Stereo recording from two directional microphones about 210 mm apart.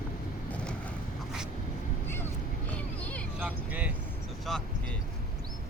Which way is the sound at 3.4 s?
5° right (ahead or behind).